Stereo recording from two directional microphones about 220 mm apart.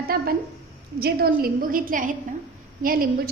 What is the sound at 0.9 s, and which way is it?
A woman's voice, 45° right (ahead or behind).